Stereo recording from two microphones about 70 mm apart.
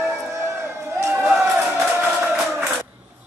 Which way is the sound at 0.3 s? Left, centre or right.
Right.